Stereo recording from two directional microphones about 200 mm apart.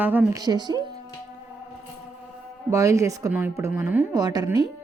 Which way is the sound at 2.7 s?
15° right (ahead or behind).